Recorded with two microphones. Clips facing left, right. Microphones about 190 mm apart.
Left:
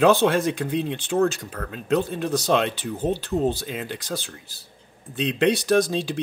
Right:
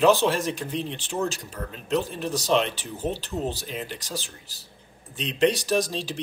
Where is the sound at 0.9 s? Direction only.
55° left (ahead or behind).